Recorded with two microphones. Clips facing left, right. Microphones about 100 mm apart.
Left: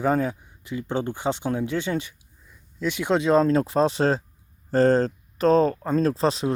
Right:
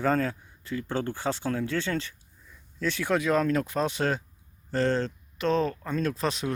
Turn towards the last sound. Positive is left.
turn(degrees=30)  # may be behind; listen again after turning